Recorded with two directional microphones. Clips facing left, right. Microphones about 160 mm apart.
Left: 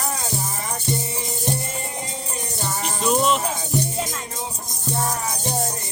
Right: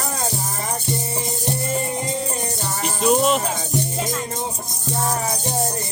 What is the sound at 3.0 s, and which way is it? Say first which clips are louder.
Music: right 3 dB; 40° right (ahead or behind).